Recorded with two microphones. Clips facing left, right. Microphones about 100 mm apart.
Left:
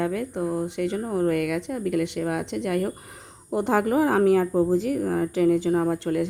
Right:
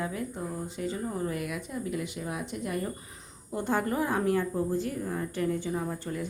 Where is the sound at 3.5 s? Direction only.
90° left.